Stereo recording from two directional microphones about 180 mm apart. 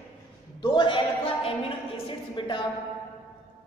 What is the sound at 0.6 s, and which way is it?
A woman's voice, 25° left (ahead or behind).